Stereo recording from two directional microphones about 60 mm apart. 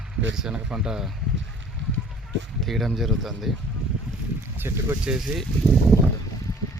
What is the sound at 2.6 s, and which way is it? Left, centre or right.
Speech, centre.